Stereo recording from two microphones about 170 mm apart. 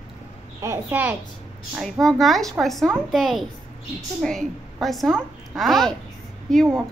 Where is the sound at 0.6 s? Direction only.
15° right (ahead or behind).